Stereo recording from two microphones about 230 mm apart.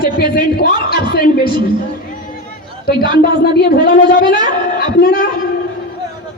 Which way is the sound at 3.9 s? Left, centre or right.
Left.